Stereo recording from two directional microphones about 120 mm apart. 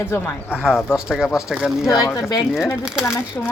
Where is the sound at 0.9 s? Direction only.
5° right (ahead or behind).